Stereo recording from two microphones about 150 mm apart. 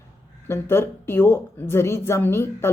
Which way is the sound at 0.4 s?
15° left (ahead or behind).